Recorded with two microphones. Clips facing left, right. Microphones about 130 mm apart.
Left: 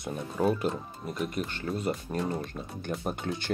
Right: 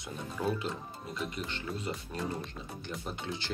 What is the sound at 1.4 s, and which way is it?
Speech, 50° left (ahead or behind).